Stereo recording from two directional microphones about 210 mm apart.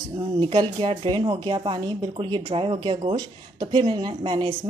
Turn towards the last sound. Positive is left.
turn(degrees=-20)  # may be behind; listen again after turning